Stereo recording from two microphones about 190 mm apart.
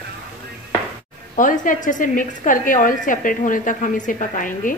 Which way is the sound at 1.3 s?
45° left (ahead or behind).